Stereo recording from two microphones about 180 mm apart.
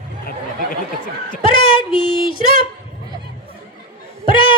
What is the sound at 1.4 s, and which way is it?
Speech, 30° left (ahead or behind).